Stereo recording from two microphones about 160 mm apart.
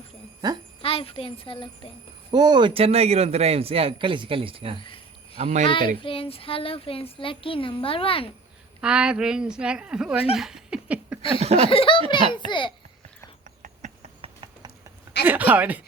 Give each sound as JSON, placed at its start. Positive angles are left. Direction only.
{"t": 0.4, "sound": "speech", "side_deg": -25}
{"t": 0.8, "sound": "speech", "side_deg": 35}
{"t": 2.3, "sound": "a man's voice", "side_deg": -25}
{"t": 4.8, "sound": "cricket", "side_deg": 35}
{"t": 5.4, "sound": "speech", "side_deg": -45}
{"t": 5.6, "sound": "speech", "side_deg": 30}
{"t": 8.8, "sound": "speech", "side_deg": -5}
{"t": 10.3, "sound": "laughter", "side_deg": 0}
{"t": 11.3, "sound": "a man's voice", "side_deg": -40}
{"t": 11.7, "sound": "speech", "side_deg": 35}
{"t": 13.6, "sound": "a sound", "side_deg": -45}
{"t": 15.2, "sound": "speech", "side_deg": -10}